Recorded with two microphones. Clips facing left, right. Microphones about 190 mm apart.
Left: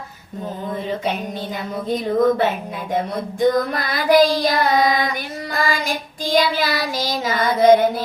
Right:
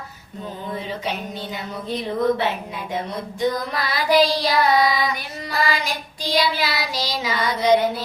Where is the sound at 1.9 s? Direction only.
45° left (ahead or behind).